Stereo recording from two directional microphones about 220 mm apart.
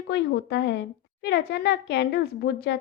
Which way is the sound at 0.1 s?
50° left (ahead or behind).